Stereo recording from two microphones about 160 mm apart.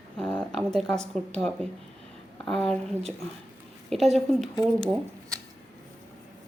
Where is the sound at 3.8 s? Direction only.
Centre (ahead or behind).